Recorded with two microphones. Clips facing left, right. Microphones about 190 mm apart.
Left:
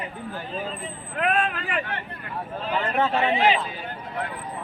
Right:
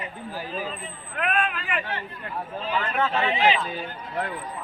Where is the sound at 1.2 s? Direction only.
30° left (ahead or behind).